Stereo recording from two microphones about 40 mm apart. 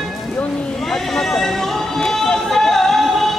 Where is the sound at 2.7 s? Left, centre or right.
Centre.